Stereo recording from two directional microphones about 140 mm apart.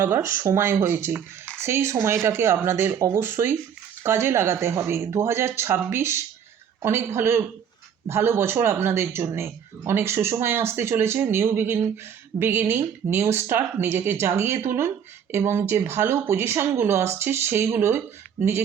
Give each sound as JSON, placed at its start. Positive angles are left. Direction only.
{"t": 0.0, "sound": "speech", "side_deg": -20}